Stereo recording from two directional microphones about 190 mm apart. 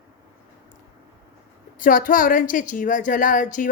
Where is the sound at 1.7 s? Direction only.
45° left (ahead or behind).